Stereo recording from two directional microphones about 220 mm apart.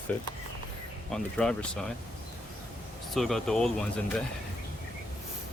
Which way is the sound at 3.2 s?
Centre (ahead or behind).